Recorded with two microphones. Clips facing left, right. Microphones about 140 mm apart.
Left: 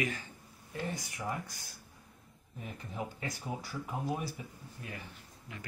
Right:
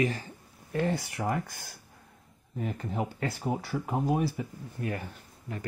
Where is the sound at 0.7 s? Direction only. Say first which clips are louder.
Right 10 dB; 70° right (ahead or behind).